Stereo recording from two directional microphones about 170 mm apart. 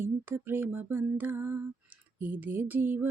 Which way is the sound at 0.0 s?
10° right (ahead or behind).